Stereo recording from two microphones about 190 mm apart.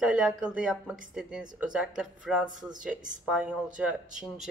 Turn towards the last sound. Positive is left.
turn(degrees=0)  # may be behind; listen again after turning